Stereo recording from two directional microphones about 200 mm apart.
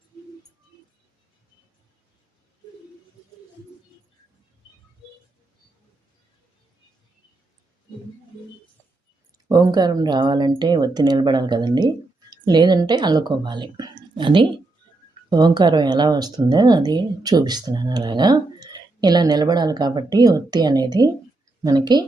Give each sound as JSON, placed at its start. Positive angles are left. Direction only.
{"t": 9.5, "sound": "speech", "side_deg": -20}